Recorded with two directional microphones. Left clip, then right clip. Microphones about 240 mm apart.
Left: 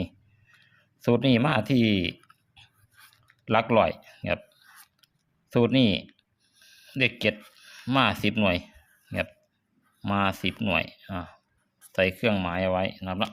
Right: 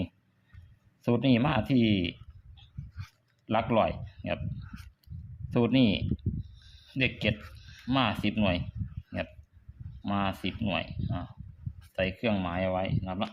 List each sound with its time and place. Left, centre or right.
1.0 s speech: centre
2.6 s a sound: centre
5.5 s speech: centre